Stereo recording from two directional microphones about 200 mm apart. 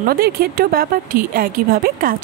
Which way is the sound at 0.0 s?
50° right (ahead or behind).